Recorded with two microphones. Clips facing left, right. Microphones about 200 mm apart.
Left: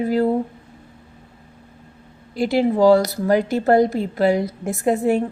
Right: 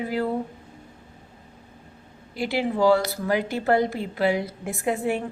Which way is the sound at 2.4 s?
40° left (ahead or behind).